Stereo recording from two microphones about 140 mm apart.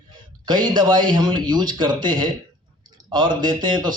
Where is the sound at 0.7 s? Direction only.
35° right (ahead or behind).